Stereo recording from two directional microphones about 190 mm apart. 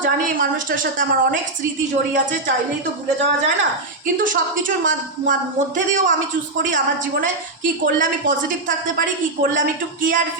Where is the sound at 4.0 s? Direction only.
45° right (ahead or behind).